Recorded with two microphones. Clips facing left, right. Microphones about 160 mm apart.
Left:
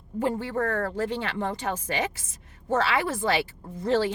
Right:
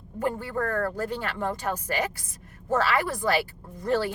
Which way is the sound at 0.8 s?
20° left (ahead or behind).